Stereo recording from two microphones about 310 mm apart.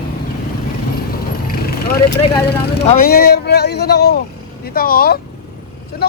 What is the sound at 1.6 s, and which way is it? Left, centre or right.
Vehicle, left.